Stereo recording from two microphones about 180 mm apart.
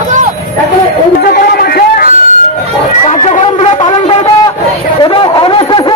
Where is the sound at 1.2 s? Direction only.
55° left (ahead or behind).